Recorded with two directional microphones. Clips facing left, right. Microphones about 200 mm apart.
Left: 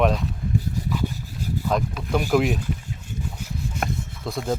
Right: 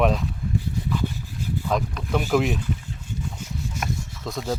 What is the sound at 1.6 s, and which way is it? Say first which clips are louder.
Speech: left 1 dB; 5° left (ahead or behind).